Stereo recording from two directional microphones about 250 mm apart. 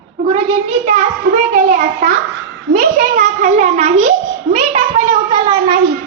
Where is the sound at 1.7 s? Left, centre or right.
Right.